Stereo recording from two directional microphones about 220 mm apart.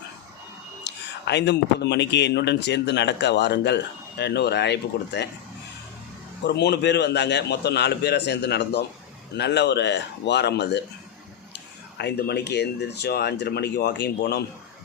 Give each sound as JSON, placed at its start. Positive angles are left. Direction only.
{"t": 0.9, "sound": "speech", "side_deg": 50}
{"t": 6.4, "sound": "speech", "side_deg": 50}
{"t": 11.9, "sound": "speech", "side_deg": 50}